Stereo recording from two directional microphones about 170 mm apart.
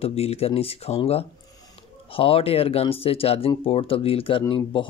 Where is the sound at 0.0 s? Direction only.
35° left (ahead or behind).